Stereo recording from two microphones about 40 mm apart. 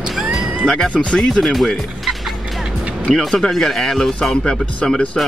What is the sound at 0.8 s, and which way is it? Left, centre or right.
Speech, left.